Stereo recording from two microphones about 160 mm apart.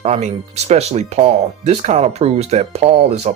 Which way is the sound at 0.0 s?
40° right (ahead or behind).